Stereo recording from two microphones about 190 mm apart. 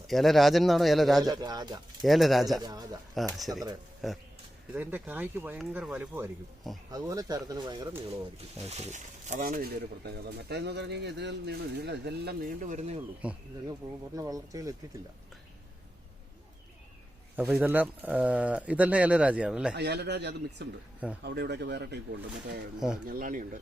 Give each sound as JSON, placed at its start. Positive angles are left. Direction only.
{"t": 0.1, "sound": "speech", "side_deg": 0}
{"t": 1.2, "sound": "speech", "side_deg": -20}
{"t": 2.0, "sound": "speech", "side_deg": 0}
{"t": 2.6, "sound": "speech", "side_deg": -20}
{"t": 3.3, "sound": "speech", "side_deg": 0}
{"t": 8.7, "sound": "speech", "side_deg": -40}
{"t": 10.1, "sound": "speech", "side_deg": -60}
{"t": 13.2, "sound": "speech", "side_deg": -5}
{"t": 14.2, "sound": "speech", "side_deg": -20}
{"t": 17.3, "sound": "speech", "side_deg": -5}
{"t": 19.7, "sound": "speech", "side_deg": -60}
{"t": 23.0, "sound": "speech", "side_deg": -45}